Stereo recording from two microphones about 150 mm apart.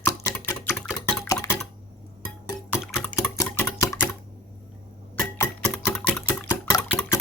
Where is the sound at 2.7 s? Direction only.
10° left (ahead or behind).